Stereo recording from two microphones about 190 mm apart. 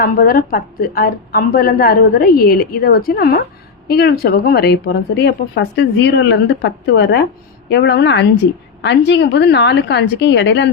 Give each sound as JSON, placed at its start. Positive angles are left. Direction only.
{"t": 0.0, "sound": "a woman's voice", "side_deg": 50}